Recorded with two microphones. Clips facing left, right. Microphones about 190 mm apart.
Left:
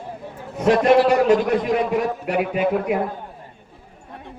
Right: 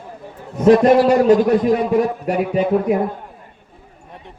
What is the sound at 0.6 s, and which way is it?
Speech, 35° right (ahead or behind).